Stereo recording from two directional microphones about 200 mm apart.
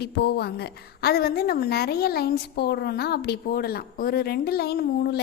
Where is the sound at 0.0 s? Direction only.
55° left (ahead or behind).